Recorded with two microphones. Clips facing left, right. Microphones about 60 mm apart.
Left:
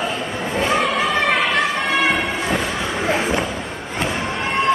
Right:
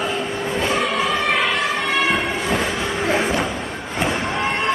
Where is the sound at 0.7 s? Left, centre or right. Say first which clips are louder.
Left 3 dB; left.